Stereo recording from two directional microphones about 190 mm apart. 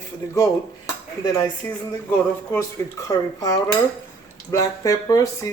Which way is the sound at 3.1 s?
20° left (ahead or behind).